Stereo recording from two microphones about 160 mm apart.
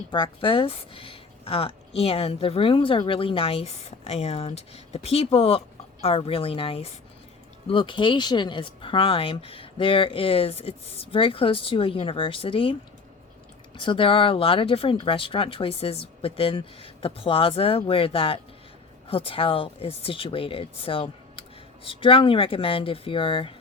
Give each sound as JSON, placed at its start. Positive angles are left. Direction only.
{"t": 0.1, "sound": "speech", "side_deg": 30}
{"t": 13.7, "sound": "speech", "side_deg": 30}